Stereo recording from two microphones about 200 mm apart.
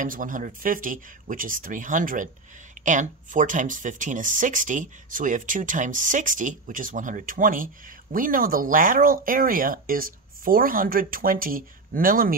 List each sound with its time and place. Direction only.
0.0 s speech: 40° right (ahead or behind)